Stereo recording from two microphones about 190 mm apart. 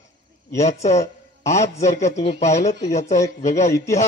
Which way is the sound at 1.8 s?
40° left (ahead or behind).